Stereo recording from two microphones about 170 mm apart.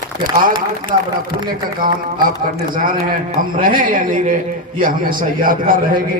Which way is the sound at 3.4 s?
55° right (ahead or behind).